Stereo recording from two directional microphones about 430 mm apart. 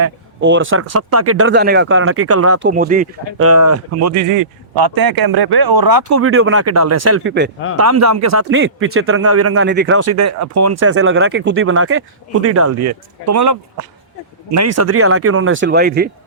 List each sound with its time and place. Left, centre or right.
0.0 s speech: right
3.4 s speech: right
4.7 s speech: right
7.8 s speech: right
8.4 s speech: right